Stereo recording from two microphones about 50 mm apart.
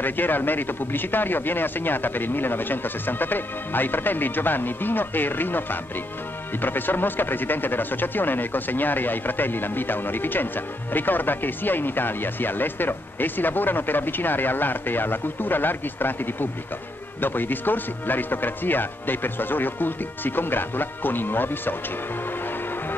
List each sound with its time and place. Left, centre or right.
0.0 s speech: left